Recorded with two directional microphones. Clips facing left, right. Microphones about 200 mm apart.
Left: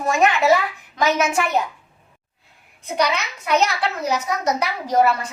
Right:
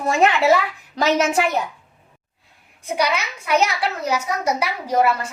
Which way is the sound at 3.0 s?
10° right (ahead or behind).